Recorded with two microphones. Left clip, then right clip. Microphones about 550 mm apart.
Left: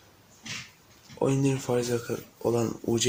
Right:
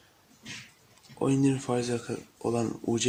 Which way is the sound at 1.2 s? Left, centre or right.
Right.